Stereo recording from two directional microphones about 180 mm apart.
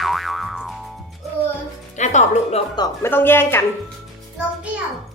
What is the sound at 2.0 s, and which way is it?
Speech, 40° left (ahead or behind).